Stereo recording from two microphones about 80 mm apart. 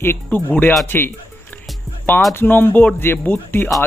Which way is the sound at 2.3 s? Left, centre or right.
Left.